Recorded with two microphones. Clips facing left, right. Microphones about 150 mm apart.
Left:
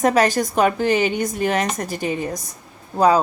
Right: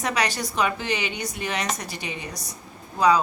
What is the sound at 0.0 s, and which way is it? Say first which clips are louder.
A woman's voice: left 9 dB; 45° left (ahead or behind).